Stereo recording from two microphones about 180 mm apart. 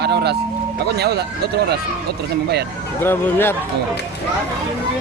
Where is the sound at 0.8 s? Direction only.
65° right (ahead or behind).